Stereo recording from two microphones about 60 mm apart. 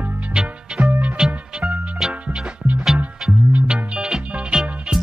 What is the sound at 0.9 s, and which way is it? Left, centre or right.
Music, right.